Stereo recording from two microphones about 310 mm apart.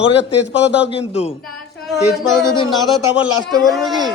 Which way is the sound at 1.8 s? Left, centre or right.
Centre.